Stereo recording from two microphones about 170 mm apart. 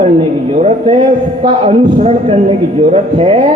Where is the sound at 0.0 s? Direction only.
35° right (ahead or behind).